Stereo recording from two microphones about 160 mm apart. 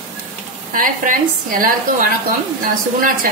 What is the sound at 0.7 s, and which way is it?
A woman's voice, 60° right (ahead or behind).